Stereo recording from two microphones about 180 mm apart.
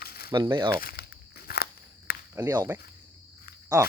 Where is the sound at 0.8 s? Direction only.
55° left (ahead or behind).